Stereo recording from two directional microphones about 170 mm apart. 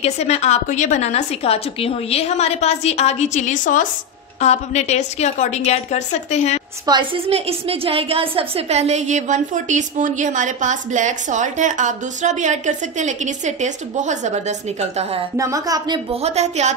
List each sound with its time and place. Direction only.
0.0 s a woman's voice: 40° left (ahead or behind)
6.9 s a woman's voice: 30° right (ahead or behind)
15.3 s speech: 20° right (ahead or behind)
16.1 s a woman's voice: 40° right (ahead or behind)